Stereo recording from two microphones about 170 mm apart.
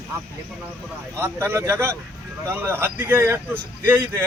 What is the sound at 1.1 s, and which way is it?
Speech, 15° right (ahead or behind).